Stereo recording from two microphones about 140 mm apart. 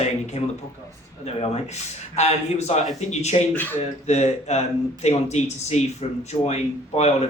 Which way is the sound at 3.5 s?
15° left (ahead or behind).